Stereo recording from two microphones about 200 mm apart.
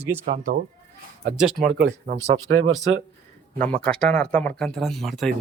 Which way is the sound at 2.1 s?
35° right (ahead or behind).